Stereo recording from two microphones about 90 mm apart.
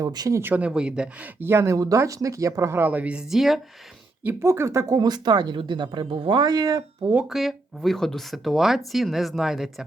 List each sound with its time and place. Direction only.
0.0 s speech: 45° right (ahead or behind)
0.5 s speech: 10° right (ahead or behind)
1.4 s speech: 30° right (ahead or behind); by 3.6 s centre (ahead or behind)
4.4 s speech: 30° right (ahead or behind)
4.9 s speech: 50° right (ahead or behind)
7.3 s speech: centre (ahead or behind)